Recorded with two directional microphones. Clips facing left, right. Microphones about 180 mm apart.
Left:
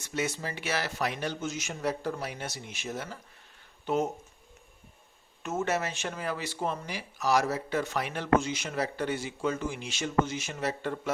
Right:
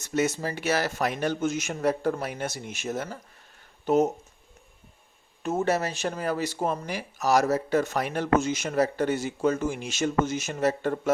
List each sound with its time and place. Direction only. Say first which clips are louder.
0.0 s speech: right 6 dB; 45° right (ahead or behind)
5.4 s speech: right 5 dB; 35° right (ahead or behind)